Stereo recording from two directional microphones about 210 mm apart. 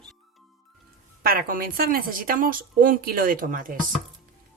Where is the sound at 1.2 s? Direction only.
45° right (ahead or behind).